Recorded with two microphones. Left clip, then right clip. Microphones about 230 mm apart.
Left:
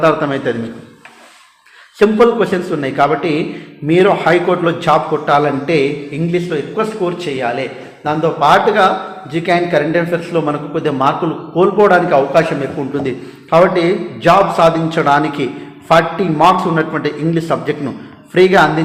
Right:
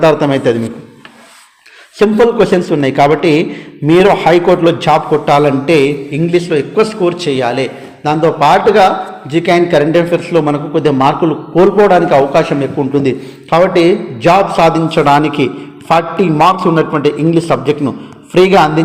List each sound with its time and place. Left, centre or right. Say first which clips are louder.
0.0 s a man's voice: right 4 dB; right
2.0 s a man's voice: right 2 dB; right